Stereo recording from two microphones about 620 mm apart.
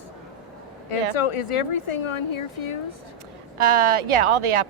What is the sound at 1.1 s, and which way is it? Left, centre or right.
Speech, left.